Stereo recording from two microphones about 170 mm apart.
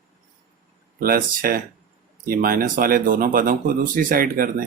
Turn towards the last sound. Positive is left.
turn(degrees=-55)  # may be behind; listen again after turning